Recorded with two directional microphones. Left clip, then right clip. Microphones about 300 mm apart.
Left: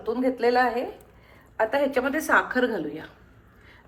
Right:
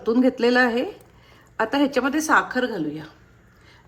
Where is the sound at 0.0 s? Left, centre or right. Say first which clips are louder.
Right 4 dB; centre.